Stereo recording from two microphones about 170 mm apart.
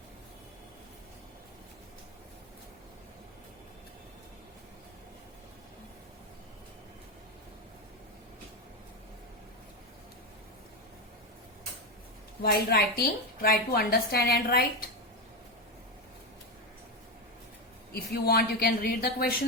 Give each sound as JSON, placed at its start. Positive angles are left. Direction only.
{"t": 12.4, "sound": "a woman's voice", "side_deg": 65}
{"t": 17.9, "sound": "a woman's voice", "side_deg": 65}